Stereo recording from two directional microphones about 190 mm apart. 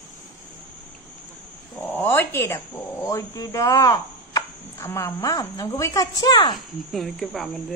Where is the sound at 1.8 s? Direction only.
10° left (ahead or behind).